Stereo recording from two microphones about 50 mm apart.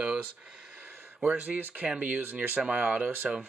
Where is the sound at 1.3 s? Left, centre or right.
Right.